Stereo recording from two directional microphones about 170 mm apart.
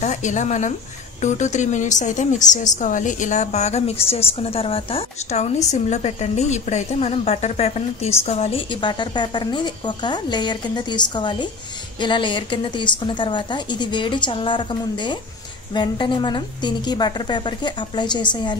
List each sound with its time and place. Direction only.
0.0 s a woman's voice: 45° left (ahead or behind); by 18.6 s 25° left (ahead or behind)